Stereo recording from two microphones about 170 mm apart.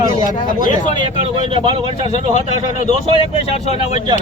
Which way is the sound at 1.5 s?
30° right (ahead or behind).